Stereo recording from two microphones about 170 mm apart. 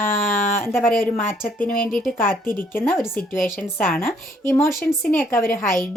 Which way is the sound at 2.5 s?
10° left (ahead or behind).